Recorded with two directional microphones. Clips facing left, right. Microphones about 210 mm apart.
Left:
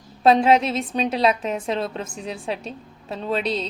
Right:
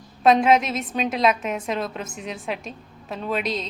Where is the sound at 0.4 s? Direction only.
30° left (ahead or behind).